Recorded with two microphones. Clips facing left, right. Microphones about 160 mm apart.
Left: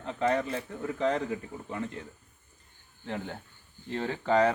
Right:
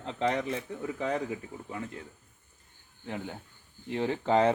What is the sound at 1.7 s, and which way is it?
Speech, 5° right (ahead or behind).